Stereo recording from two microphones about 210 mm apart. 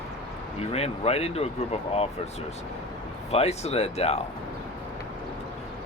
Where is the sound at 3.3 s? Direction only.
30° left (ahead or behind).